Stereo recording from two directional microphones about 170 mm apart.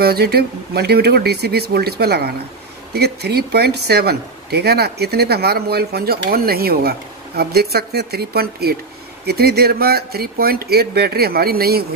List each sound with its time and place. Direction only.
0.0 s speech: 70° right (ahead or behind)